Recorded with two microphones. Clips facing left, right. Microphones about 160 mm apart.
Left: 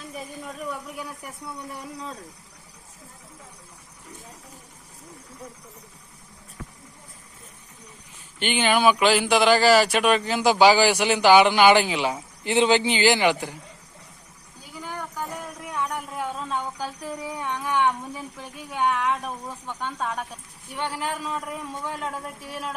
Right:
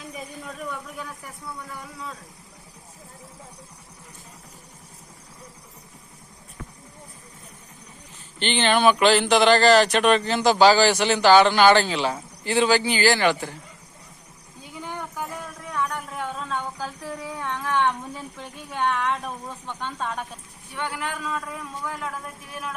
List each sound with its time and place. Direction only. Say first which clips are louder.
0.1 s speech: left 2 dB; centre (ahead or behind)
1.7 s a man's voice: left 1 dB; 35° left (ahead or behind)
8.4 s speech: right 1 dB; 10° left (ahead or behind)
14.9 s a sound: left 1 dB; centre (ahead or behind)
15.7 s a sound: right 1 dB; 10° left (ahead or behind)
18.1 s speech: even; 5° left (ahead or behind)
20.7 s a man's voice: left 1 dB; 25° left (ahead or behind)